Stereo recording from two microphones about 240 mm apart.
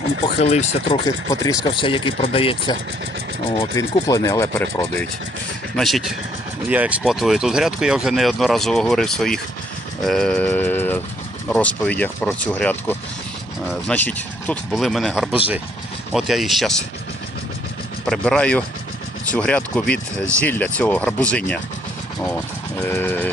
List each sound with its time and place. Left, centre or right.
0.3 s speech: left
1.0 s speech: centre
3.8 s speech: centre
18.0 s speech: centre
22.8 s speech: centre